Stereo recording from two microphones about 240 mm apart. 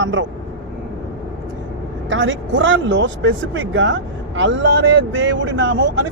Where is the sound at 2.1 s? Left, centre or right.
Right.